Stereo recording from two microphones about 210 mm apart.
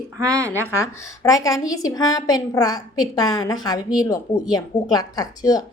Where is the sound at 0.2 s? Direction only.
15° right (ahead or behind).